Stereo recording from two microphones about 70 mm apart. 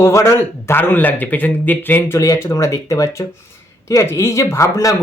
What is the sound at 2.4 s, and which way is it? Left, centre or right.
Speech, left.